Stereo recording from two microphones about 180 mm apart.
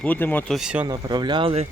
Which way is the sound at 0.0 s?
10° left (ahead or behind).